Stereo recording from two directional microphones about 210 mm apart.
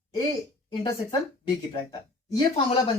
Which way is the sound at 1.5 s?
20° left (ahead or behind).